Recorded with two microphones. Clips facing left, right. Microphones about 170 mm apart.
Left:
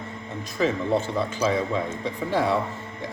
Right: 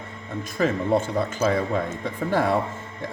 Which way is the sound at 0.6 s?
50° right (ahead or behind).